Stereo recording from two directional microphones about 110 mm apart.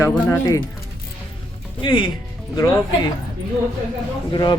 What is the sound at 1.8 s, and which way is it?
Speech, 45° left (ahead or behind).